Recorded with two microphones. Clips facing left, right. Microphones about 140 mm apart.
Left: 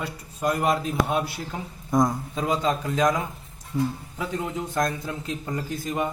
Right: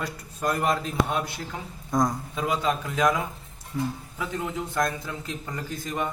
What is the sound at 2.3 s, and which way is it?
Speech, 35° left (ahead or behind).